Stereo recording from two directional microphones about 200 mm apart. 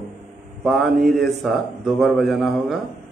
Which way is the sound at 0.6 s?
Centre (ahead or behind).